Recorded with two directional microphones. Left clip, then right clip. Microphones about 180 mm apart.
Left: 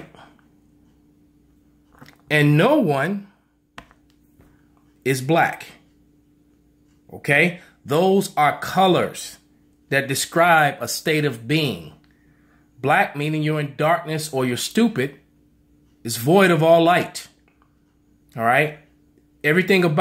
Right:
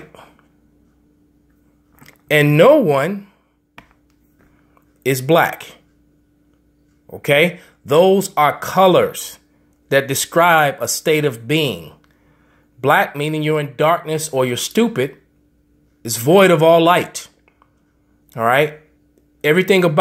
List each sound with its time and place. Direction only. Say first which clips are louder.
2.0 s speech: right 4 dB; 15° right (ahead or behind)
5.0 s speech: right 4 dB; 20° right (ahead or behind)
7.1 s speech: right 4 dB; 20° right (ahead or behind)
18.3 s speech: right 3 dB; 15° right (ahead or behind)